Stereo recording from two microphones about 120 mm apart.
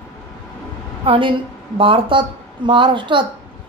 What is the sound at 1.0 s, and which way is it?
A woman's voice, 45° right (ahead or behind).